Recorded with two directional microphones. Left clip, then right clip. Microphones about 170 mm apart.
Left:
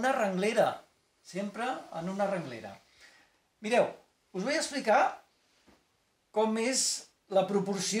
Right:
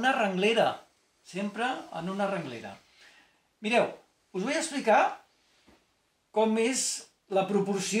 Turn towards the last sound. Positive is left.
turn(degrees=15)  # may be behind; listen again after turning